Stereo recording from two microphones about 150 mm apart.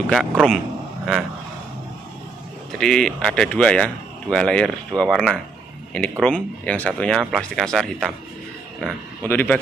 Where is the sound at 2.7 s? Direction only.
5° left (ahead or behind).